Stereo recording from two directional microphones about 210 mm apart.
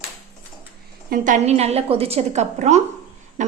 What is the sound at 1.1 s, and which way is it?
A woman's voice, 35° right (ahead or behind).